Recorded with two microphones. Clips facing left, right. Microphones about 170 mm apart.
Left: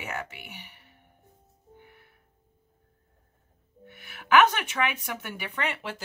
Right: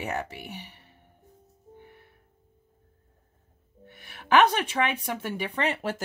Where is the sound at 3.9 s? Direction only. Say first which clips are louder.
Even; 35° right (ahead or behind).